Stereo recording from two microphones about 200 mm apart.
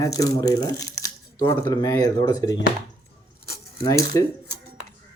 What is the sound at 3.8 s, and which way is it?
Speech, 15° left (ahead or behind).